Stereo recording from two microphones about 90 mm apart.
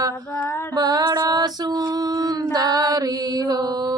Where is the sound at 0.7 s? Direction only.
45° right (ahead or behind).